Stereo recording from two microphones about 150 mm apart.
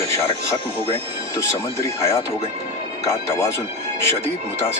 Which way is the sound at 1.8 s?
20° left (ahead or behind).